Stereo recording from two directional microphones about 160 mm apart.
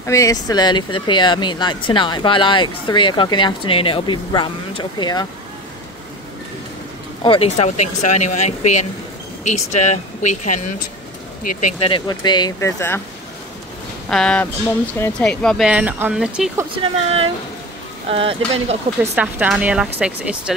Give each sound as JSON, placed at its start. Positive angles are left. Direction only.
{"t": 0.0, "sound": "speech", "side_deg": 20}
{"t": 7.2, "sound": "speech", "side_deg": 40}
{"t": 11.8, "sound": "speech", "side_deg": 30}
{"t": 14.0, "sound": "speech", "side_deg": 5}
{"t": 15.2, "sound": "speech", "side_deg": 5}
{"t": 16.8, "sound": "speech", "side_deg": -35}
{"t": 19.1, "sound": "speech", "side_deg": -10}